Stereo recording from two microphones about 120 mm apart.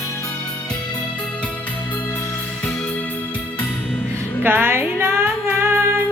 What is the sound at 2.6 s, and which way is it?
Music, 10° left (ahead or behind).